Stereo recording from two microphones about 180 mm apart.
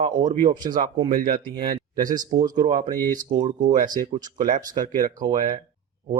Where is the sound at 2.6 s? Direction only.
45° right (ahead or behind).